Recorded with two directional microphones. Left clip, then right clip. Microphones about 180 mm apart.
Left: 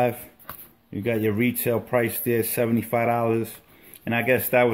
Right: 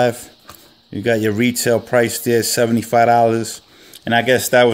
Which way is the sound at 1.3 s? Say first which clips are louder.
Right 8 dB; 55° right (ahead or behind).